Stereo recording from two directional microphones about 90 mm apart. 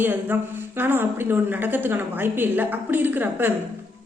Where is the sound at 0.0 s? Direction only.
20° right (ahead or behind).